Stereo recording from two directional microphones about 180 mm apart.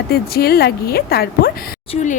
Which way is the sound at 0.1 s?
60° left (ahead or behind).